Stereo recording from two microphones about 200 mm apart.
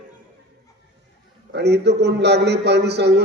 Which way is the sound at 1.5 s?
55° right (ahead or behind).